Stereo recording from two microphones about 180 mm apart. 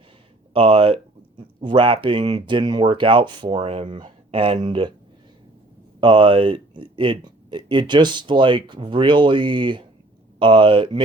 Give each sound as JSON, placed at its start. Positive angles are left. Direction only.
{"t": 0.5, "sound": "speech", "side_deg": -30}
{"t": 6.0, "sound": "speech", "side_deg": -30}